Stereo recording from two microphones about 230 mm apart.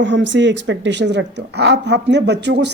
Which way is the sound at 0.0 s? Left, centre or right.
Right.